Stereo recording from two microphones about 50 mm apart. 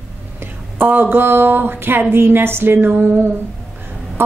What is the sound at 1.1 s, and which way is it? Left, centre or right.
Speech, right.